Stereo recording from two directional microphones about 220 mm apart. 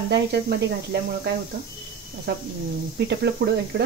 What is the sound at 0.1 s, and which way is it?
Speech, 50° right (ahead or behind).